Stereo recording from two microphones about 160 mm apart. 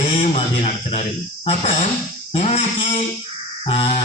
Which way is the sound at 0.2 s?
40° left (ahead or behind).